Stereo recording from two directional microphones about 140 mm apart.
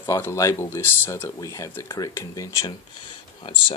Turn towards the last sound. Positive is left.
turn(degrees=35)  # may be behind; listen again after turning